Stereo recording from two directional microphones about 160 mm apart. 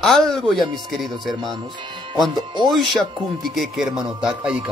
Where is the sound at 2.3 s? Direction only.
25° right (ahead or behind).